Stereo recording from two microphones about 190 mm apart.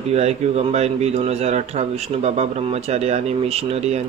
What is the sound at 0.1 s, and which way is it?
Speech, 35° right (ahead or behind).